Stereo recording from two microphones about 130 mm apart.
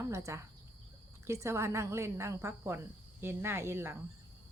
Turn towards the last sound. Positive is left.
turn(degrees=-20)  # may be behind; listen again after turning